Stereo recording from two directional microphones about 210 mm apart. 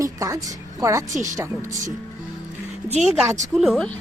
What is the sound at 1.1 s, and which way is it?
Speech, 35° right (ahead or behind).